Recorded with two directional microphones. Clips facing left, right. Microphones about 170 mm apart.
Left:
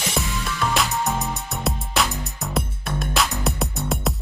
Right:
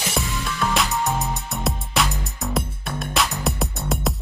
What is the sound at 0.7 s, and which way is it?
Music, centre (ahead or behind).